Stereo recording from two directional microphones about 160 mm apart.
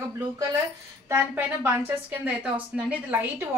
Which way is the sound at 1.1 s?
15° right (ahead or behind).